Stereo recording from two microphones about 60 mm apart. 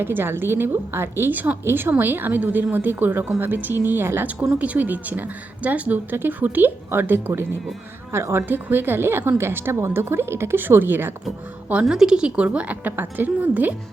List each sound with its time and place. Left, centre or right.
0.0 s a woman's voice: right
4.5 s a woman's voice: right
8.4 s a woman's voice: right
11.9 s a woman's voice: centre; by 13.7 s right